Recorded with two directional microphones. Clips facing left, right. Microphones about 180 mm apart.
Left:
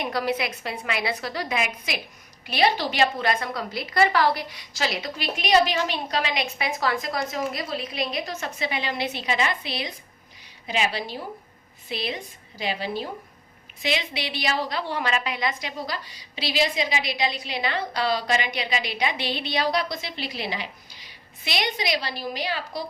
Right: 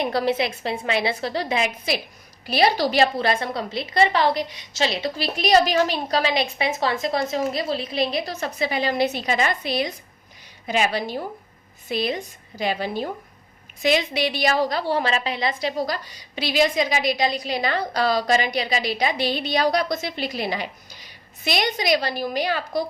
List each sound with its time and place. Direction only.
0.0 s a woman's voice: 30° right (ahead or behind); by 22.8 s 50° right (ahead or behind)